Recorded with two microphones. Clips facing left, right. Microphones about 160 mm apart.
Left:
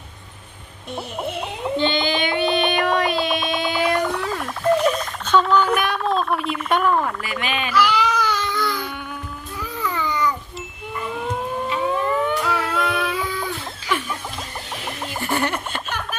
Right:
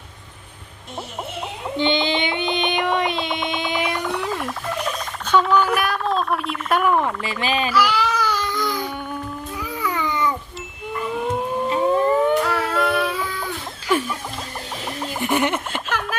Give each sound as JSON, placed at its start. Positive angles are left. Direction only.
{"t": 1.7, "sound": "a sound", "side_deg": -20}
{"t": 4.0, "sound": "music", "side_deg": -5}
{"t": 5.3, "sound": "a sound", "side_deg": -5}
{"t": 7.0, "sound": "speech", "side_deg": -25}
{"t": 7.7, "sound": "baby cry", "side_deg": -10}
{"t": 9.8, "sound": "babbling", "side_deg": -15}
{"t": 11.7, "sound": "civil defense siren", "side_deg": -35}
{"t": 12.5, "sound": "child singing", "side_deg": 0}
{"t": 15.2, "sound": "a sound", "side_deg": -20}